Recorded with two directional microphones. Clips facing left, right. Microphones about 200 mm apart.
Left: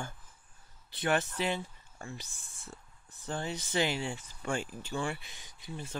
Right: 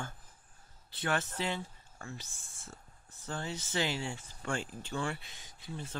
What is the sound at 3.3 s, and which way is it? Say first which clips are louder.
Speech: left 3 dB; 15° left (ahead or behind).